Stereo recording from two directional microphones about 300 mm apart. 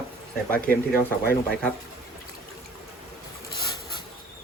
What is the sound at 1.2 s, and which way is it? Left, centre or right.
Speech, left.